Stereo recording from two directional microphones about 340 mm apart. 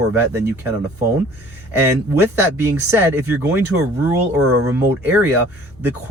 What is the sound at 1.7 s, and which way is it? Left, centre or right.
Speech, centre.